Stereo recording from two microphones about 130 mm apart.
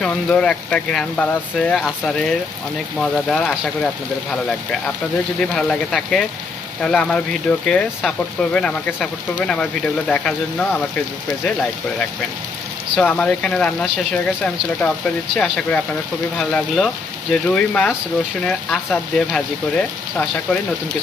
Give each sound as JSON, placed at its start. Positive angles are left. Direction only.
{"t": 0.0, "sound": "speech", "side_deg": 5}
{"t": 5.4, "sound": "speech", "side_deg": 0}
{"t": 13.0, "sound": "speech", "side_deg": 5}